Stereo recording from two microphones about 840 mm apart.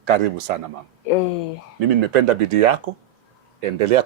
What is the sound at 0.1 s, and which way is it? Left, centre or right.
Speech, right.